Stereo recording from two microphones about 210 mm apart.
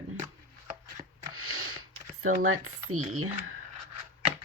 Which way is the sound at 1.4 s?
90° right.